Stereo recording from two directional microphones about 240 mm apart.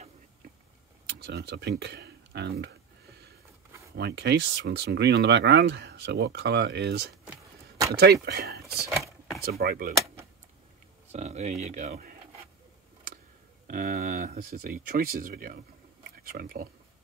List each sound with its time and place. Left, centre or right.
1.0 s speech: right
3.9 s speech: right
7.2 s a sound: centre
7.9 s speech: right
11.1 s speech: right
13.7 s speech: right